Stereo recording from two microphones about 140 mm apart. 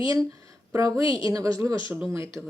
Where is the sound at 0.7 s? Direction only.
25° right (ahead or behind).